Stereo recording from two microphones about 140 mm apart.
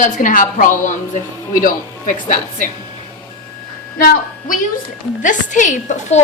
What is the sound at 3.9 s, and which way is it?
Speech, 80° left.